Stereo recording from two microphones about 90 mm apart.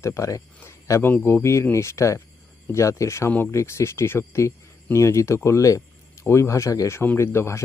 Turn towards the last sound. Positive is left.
turn(degrees=30)  # may be behind; listen again after turning